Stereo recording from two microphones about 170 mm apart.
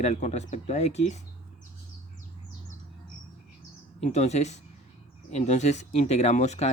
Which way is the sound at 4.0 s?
40° left (ahead or behind).